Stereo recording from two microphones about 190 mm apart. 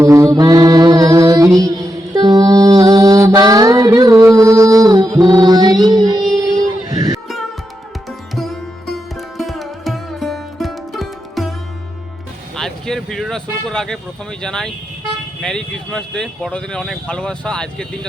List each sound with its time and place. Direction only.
0.0 s music: 15° right (ahead or behind)
6.6 s vehicle: 20° right (ahead or behind)
8.4 s music: centre (ahead or behind)
12.5 s vehicle: centre (ahead or behind)
15.4 s speech: 5° left (ahead or behind)